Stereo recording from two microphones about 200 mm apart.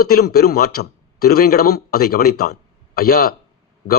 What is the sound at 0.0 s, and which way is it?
A man's voice, 50° left (ahead or behind).